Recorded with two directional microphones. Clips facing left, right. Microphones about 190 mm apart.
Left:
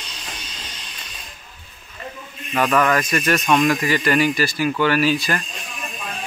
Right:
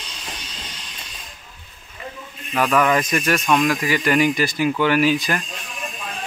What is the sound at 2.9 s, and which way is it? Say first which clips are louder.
Speech: even; 15° right (ahead or behind).